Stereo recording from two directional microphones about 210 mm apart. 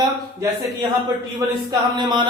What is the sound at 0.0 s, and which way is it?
Speech, 15° right (ahead or behind).